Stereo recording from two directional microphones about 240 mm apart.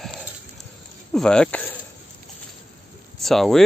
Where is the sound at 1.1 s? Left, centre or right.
Centre.